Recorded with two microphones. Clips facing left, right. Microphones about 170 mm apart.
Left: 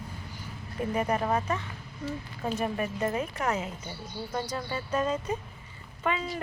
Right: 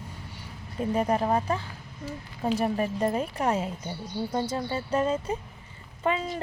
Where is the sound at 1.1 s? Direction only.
30° right (ahead or behind).